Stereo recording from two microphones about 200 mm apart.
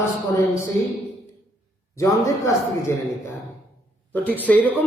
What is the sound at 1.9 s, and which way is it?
Speech, 15° left (ahead or behind).